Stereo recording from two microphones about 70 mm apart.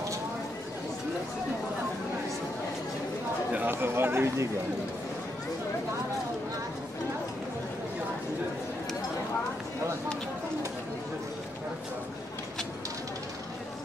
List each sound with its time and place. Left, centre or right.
3.5 s speech: right